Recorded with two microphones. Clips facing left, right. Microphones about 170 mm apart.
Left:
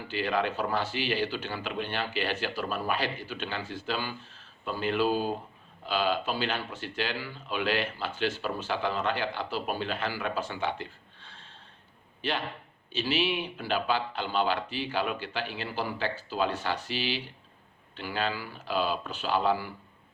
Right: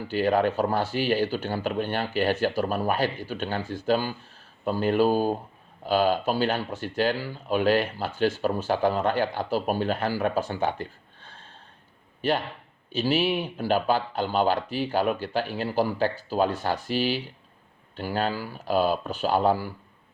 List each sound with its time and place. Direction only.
0.1 s speech: 45° right (ahead or behind)
12.9 s speech: 45° right (ahead or behind)